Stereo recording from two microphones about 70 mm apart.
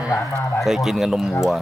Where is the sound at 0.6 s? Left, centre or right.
Centre.